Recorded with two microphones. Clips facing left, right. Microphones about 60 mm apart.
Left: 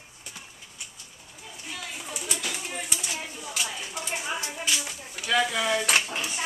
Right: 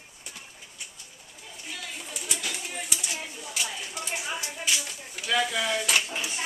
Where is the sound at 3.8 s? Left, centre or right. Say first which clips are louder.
Left 1 dB; centre.